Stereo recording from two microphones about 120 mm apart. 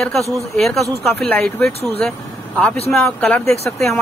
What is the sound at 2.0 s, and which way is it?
Speech, 5° left (ahead or behind).